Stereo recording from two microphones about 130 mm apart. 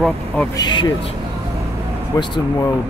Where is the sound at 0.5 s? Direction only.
35° left (ahead or behind).